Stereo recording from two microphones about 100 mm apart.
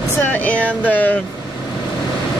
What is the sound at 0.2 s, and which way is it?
Speech, 15° left (ahead or behind).